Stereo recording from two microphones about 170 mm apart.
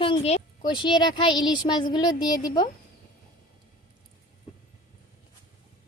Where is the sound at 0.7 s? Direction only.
25° left (ahead or behind).